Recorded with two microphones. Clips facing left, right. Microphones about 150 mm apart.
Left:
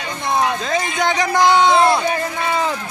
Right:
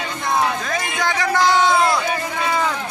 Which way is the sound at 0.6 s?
25° left (ahead or behind).